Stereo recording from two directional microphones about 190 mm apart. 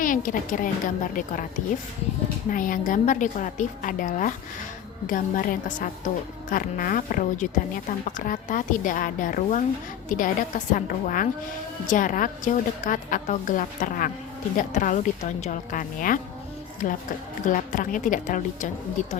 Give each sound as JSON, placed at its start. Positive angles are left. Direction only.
{"t": 0.0, "sound": "a woman's voice", "side_deg": 45}
{"t": 2.5, "sound": "a woman's voice", "side_deg": 45}